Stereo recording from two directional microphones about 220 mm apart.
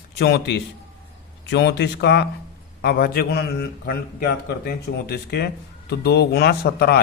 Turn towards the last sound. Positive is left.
turn(degrees=45)  # may be behind; listen again after turning